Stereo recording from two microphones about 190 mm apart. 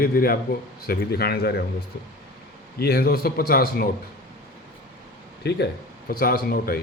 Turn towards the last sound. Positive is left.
turn(degrees=55)  # may be behind; listen again after turning